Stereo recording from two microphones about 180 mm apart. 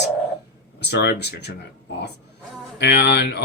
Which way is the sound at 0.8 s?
65° left (ahead or behind).